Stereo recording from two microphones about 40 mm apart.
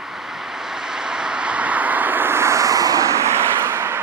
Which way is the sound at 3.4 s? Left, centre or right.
Right.